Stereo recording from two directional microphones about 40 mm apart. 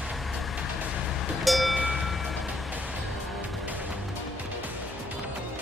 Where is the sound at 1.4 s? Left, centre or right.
Centre.